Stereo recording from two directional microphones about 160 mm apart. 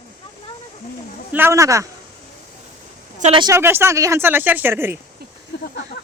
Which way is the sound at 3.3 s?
25° right (ahead or behind).